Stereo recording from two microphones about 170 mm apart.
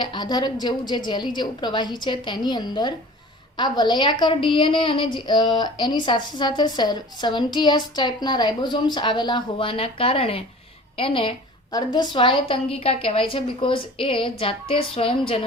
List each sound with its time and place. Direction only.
0.0 s a woman's voice: 25° left (ahead or behind)